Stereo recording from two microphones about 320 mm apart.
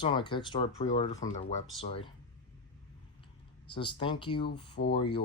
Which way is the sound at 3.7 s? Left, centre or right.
Centre.